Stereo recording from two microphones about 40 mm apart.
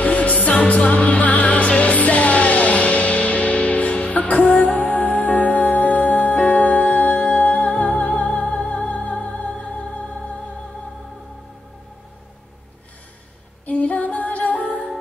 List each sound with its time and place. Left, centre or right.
0.0 s music: left
13.7 s music: left